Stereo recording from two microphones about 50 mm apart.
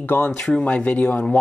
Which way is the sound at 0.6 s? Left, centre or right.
Left.